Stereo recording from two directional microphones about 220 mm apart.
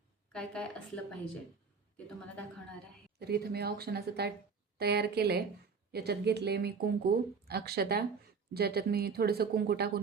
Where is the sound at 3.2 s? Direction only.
45° right (ahead or behind).